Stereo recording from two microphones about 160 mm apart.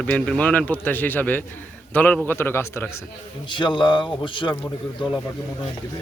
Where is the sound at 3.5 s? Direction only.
30° left (ahead or behind).